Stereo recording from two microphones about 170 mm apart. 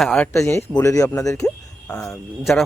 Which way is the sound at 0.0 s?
Centre (ahead or behind).